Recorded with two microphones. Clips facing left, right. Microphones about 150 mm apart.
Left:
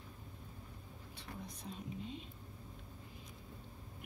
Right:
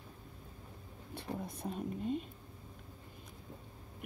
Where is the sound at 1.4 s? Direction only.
55° right (ahead or behind).